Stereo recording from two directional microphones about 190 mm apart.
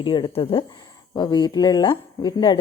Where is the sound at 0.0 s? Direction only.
25° left (ahead or behind).